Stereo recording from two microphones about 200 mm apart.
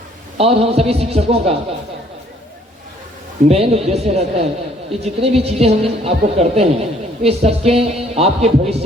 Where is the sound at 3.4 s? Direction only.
30° right (ahead or behind).